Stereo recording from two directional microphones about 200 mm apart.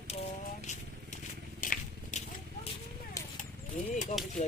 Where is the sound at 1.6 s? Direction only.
40° left (ahead or behind).